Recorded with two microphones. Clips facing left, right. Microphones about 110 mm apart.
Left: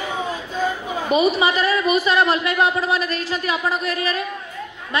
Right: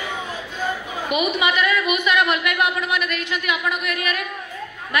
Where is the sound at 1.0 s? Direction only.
30° left (ahead or behind).